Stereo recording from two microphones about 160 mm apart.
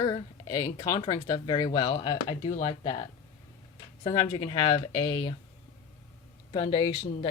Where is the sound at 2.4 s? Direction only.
45° left (ahead or behind).